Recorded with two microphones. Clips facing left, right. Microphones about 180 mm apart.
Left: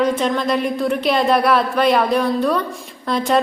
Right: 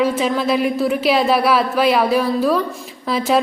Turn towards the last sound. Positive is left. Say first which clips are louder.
# even
turn(degrees=-5)  # may be behind; listen again after turning